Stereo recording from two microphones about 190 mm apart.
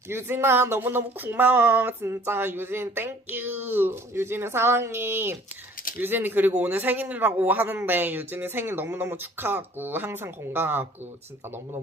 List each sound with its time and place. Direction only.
0.1 s speech: 15° right (ahead or behind)